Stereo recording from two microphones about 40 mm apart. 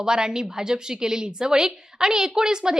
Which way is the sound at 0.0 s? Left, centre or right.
Centre.